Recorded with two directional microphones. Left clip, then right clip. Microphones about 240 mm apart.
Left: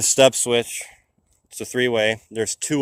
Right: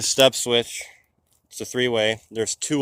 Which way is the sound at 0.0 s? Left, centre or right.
Left.